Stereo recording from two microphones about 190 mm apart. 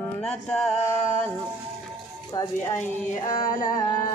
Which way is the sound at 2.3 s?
15° left (ahead or behind).